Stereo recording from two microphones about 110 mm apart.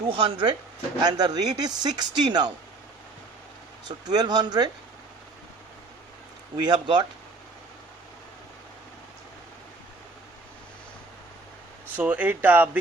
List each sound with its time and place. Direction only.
0.1 s speech: 50° right (ahead or behind)
1.0 s a man's voice: 40° right (ahead or behind)
3.8 s a man's voice: 40° right (ahead or behind)
6.6 s speech: 45° right (ahead or behind)
11.9 s speech: 15° right (ahead or behind)